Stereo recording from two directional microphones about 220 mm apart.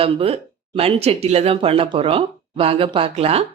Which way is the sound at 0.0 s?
25° right (ahead or behind).